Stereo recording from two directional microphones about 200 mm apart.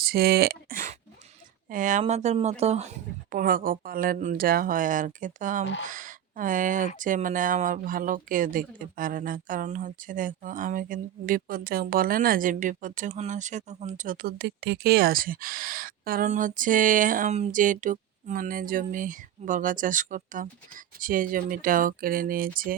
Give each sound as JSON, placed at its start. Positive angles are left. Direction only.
{"t": 0.0, "sound": "a sound", "side_deg": -50}
{"t": 1.7, "sound": "speech", "side_deg": -40}
{"t": 3.3, "sound": "speech", "side_deg": -45}